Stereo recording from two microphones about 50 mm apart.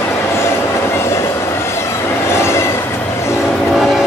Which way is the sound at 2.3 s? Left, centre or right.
Left.